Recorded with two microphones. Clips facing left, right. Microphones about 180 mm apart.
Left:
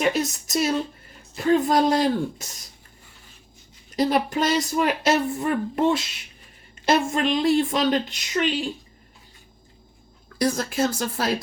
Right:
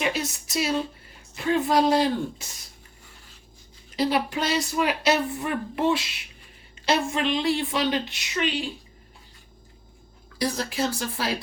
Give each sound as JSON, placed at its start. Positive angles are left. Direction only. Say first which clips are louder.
{"t": 0.0, "sound": "speech", "louder": "left 5 dB", "side_deg": 45}
{"t": 3.9, "sound": "speech", "louder": "left 3 dB", "side_deg": 45}
{"t": 10.3, "sound": "speech", "louder": "left 4 dB", "side_deg": 45}